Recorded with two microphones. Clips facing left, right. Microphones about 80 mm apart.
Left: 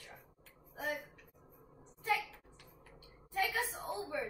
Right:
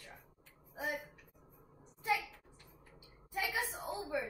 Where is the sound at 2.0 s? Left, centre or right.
Centre.